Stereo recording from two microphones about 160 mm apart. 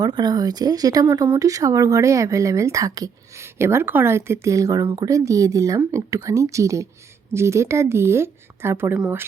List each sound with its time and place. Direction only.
0.0 s a woman's voice: 25° right (ahead or behind); by 9.2 s 10° right (ahead or behind)